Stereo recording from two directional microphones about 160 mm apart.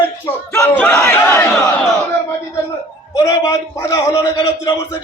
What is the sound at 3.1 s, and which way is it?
A man's voice, 20° left (ahead or behind).